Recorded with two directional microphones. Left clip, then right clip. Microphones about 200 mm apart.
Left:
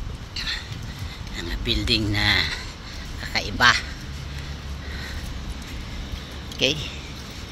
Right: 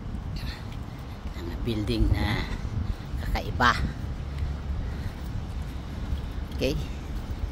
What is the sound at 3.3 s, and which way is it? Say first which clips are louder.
Speech: left 5 dB; 20° right (ahead or behind).